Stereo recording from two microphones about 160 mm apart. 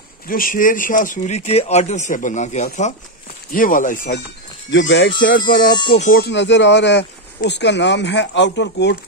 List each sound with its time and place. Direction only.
0.3 s speech: 60° left (ahead or behind)
4.6 s speech: 90° left
5.7 s music: 30° left (ahead or behind)
6.1 s speech: 90° left